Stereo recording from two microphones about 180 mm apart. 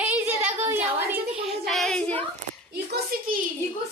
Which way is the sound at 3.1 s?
55° right (ahead or behind).